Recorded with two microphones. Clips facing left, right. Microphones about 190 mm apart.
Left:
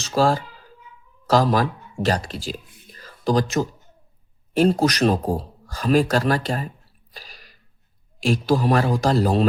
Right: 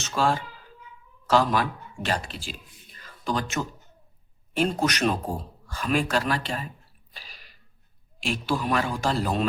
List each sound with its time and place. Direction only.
0.0 s speech: 35° left (ahead or behind)
7.1 s sneeze: 40° left (ahead or behind)
8.2 s speech: 40° left (ahead or behind)